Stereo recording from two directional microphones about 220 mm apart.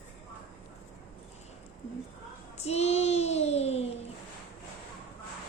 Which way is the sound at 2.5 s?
30° left (ahead or behind).